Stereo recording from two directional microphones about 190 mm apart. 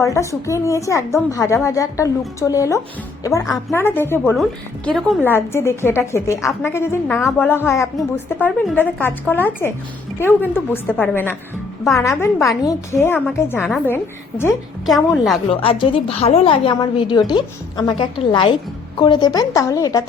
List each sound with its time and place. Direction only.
0.0 s a woman's voice: 15° left (ahead or behind)
5.3 s a woman's voice: 15° left (ahead or behind)
12.6 s a woman's voice: 15° left (ahead or behind)
14.8 s a woman's voice: centre (ahead or behind)
15.4 s a woman's voice: 30° left (ahead or behind)